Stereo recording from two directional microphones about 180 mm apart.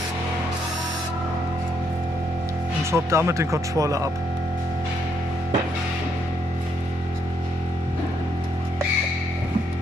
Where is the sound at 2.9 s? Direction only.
15° right (ahead or behind).